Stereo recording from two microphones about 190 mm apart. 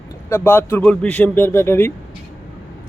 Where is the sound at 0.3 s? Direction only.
10° left (ahead or behind).